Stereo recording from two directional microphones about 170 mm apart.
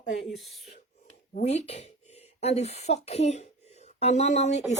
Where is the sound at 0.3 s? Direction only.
Centre (ahead or behind).